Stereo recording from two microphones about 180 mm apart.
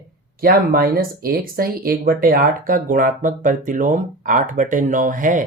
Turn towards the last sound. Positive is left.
turn(degrees=-45)  # may be behind; listen again after turning